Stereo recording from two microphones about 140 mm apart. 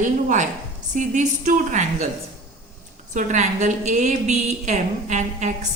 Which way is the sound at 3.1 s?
60° right (ahead or behind).